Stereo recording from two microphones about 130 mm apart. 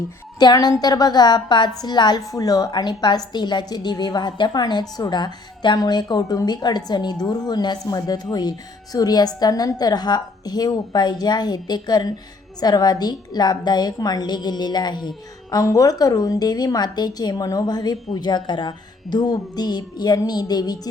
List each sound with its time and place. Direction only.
0.3 s a woman's voice: 30° left (ahead or behind)